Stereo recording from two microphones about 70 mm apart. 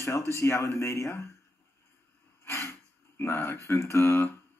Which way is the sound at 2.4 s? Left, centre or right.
Left.